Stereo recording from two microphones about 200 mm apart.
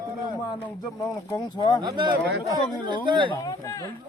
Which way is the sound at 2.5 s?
25° right (ahead or behind).